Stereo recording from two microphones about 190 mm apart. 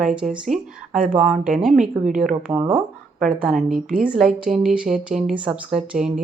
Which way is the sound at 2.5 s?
20° right (ahead or behind).